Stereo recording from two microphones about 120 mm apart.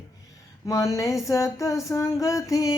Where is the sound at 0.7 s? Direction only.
25° left (ahead or behind).